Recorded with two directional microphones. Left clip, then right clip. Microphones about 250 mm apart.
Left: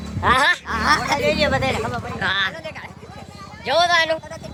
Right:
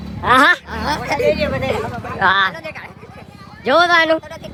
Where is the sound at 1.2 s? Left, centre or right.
Left.